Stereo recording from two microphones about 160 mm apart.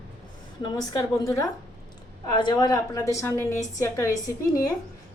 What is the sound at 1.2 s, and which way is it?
A woman's voice, 20° left (ahead or behind).